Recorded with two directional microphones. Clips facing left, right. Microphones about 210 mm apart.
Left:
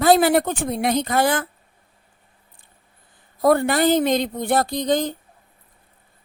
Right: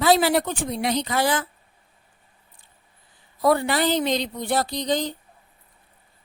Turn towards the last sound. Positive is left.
turn(degrees=50)  # may be behind; listen again after turning